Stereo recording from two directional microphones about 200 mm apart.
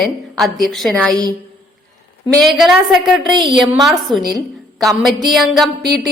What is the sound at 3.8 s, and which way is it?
Speech, centre (ahead or behind).